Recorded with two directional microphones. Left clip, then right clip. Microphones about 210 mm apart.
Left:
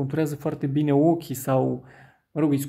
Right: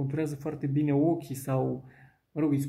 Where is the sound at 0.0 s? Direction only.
35° left (ahead or behind).